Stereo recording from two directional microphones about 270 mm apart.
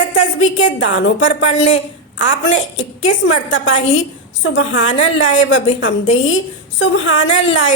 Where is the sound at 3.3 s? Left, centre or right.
Left.